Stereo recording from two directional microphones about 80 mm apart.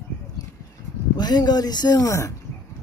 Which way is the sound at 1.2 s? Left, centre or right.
Left.